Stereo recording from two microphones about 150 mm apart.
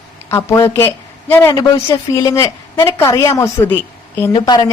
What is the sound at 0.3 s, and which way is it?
A woman's voice, 15° left (ahead or behind).